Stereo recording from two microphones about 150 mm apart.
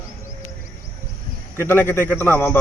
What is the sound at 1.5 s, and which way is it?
Speech, 15° left (ahead or behind).